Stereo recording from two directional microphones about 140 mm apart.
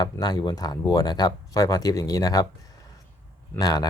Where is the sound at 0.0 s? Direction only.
30° left (ahead or behind).